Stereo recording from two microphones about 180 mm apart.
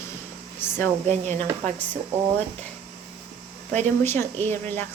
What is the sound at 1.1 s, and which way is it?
Speech, 40° right (ahead or behind).